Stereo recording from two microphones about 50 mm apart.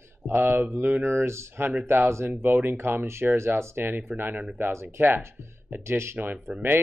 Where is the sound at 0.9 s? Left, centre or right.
Right.